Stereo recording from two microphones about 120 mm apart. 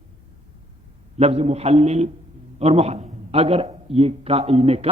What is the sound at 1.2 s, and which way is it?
A man's voice, 60° right (ahead or behind).